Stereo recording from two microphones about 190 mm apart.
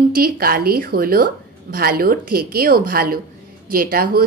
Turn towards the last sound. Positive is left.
turn(degrees=-50)  # may be behind; listen again after turning